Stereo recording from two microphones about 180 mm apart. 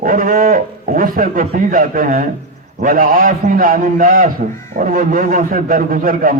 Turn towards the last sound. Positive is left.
turn(degrees=-50)  # may be behind; listen again after turning